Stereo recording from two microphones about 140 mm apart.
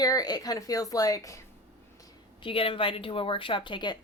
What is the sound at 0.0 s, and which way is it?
Speech, 25° left (ahead or behind).